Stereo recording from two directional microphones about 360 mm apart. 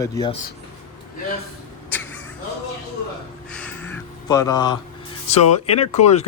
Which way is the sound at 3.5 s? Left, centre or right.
Centre.